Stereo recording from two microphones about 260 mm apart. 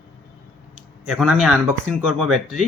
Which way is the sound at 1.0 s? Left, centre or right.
Centre.